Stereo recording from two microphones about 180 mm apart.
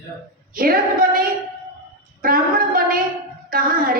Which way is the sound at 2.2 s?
50° right (ahead or behind).